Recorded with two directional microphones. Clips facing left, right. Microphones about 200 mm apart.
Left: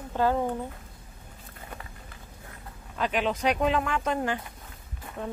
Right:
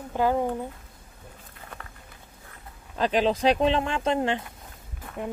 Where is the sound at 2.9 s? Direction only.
30° right (ahead or behind).